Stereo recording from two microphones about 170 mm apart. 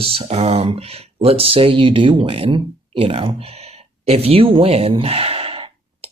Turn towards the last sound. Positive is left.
turn(degrees=-35)  # may be behind; listen again after turning